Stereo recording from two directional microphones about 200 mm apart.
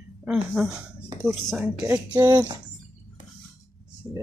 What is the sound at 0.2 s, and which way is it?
Speech, 5° right (ahead or behind).